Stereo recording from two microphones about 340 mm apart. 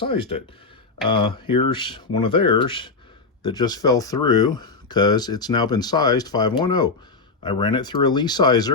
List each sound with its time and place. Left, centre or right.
0.0 s speech: centre